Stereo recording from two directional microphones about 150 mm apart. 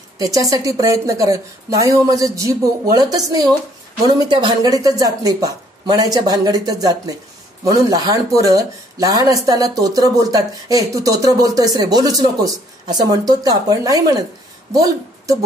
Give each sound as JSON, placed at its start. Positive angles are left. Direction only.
{"t": 0.2, "sound": "a woman's voice", "side_deg": -25}